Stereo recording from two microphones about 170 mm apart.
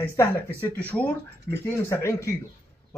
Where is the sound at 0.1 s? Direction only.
15° left (ahead or behind).